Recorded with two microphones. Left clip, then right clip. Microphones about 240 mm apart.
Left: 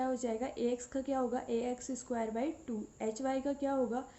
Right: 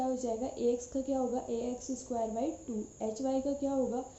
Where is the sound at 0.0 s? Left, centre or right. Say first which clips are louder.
Right 2 dB; left.